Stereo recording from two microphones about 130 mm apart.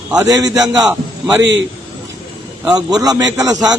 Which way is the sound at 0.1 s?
30° right (ahead or behind).